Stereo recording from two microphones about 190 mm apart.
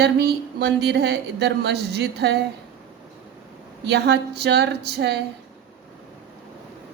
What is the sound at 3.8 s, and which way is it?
Speech, 60° right (ahead or behind).